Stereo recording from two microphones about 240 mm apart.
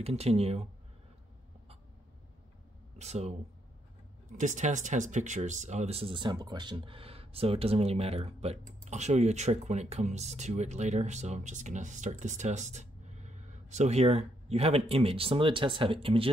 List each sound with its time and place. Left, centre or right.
0.0 s speech: right
3.0 s speech: right
4.4 s speech: right